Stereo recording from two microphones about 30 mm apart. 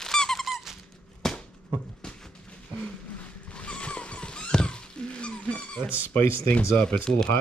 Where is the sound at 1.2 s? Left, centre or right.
Centre.